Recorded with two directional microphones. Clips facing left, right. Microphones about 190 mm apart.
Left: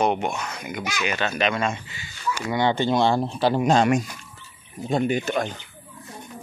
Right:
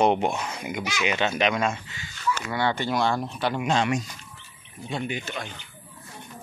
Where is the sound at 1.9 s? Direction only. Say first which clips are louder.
Right 1 dB; 15° left (ahead or behind); by 5.5 s 45° left (ahead or behind).